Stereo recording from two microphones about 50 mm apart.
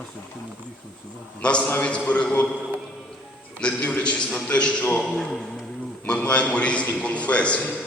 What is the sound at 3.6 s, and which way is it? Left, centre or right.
A man's voice, left.